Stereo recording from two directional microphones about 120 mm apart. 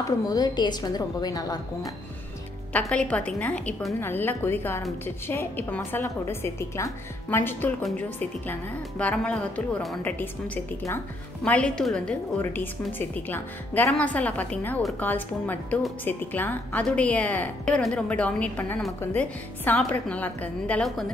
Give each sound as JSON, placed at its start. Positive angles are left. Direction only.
{"t": 0.3, "sound": "a woman's voice", "side_deg": 35}
{"t": 2.8, "sound": "a woman's voice", "side_deg": 10}